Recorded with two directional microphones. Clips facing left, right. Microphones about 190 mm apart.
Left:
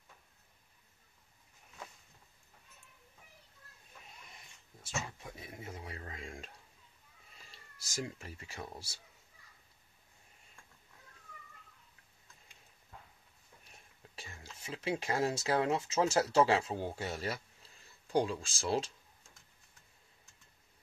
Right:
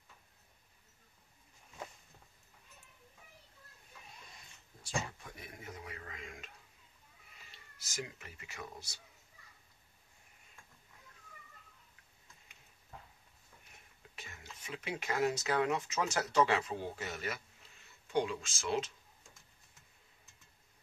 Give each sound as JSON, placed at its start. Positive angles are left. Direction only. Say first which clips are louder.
{"t": 5.2, "sound": "a sound", "louder": "left 3 dB", "side_deg": 25}
{"t": 7.8, "sound": "speech", "louder": "left 3 dB", "side_deg": 35}
{"t": 14.1, "sound": "speech", "louder": "left 1 dB", "side_deg": 30}